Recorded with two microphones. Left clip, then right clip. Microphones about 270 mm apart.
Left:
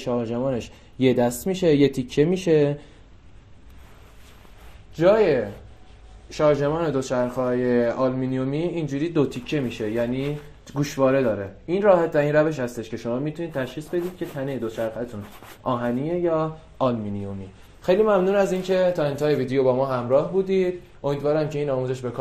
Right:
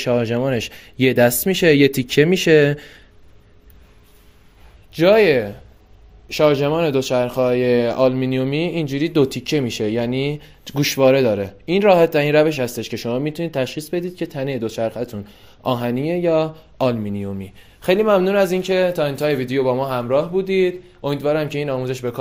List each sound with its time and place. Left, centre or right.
0.0 s speech: right
4.9 s speech: right
7.1 s speech: right
16.7 s speech: right